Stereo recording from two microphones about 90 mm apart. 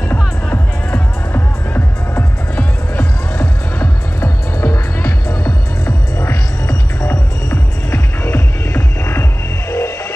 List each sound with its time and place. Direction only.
0.5 s music: 25° left (ahead or behind)